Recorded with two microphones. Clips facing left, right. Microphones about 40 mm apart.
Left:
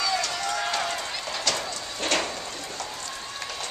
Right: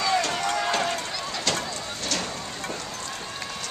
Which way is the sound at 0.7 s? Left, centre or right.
Centre.